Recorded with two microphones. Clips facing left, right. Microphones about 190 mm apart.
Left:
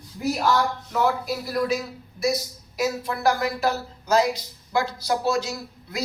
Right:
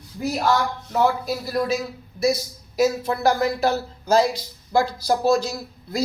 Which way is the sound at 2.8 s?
25° right (ahead or behind).